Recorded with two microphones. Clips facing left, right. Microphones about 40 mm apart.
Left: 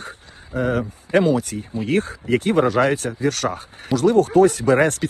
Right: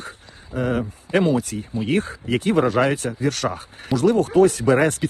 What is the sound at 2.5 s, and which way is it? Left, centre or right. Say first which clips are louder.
Speech: even; left.